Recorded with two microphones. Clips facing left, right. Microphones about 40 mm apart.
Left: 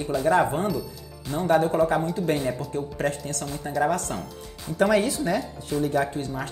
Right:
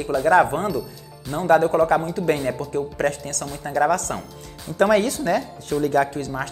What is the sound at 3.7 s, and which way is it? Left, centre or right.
Speech, right.